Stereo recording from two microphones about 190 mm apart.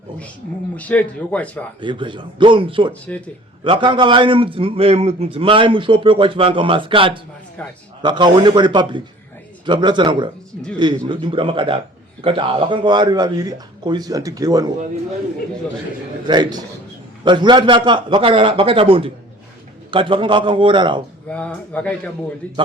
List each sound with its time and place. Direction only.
0.8 s speech: 5° left (ahead or behind)
1.8 s a man's voice: 25° right (ahead or behind)
16.2 s a man's voice: 25° right (ahead or behind)
21.2 s speech: 5° left (ahead or behind)